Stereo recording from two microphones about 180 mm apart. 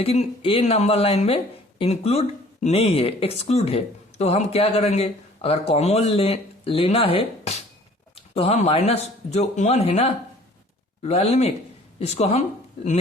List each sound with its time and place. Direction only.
0.0 s speech: 35° left (ahead or behind)